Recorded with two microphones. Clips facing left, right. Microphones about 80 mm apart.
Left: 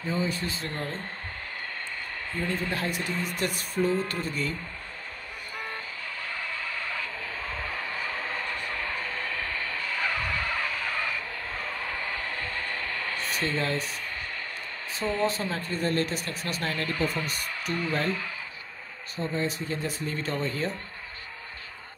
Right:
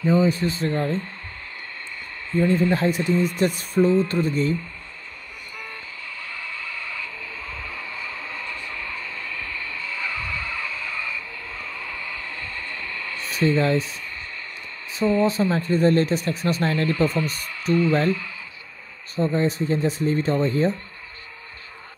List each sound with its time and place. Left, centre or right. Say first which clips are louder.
0.0 s speech: right 10 dB; right
2.3 s speech: right 11 dB; right
6.2 s a sound: even; left
13.4 s speech: right 10 dB; right
15.0 s speech: right 8 dB; right
19.1 s speech: right 8 dB; right